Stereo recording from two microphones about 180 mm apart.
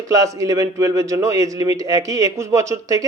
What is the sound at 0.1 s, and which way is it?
A man's voice, 20° right (ahead or behind).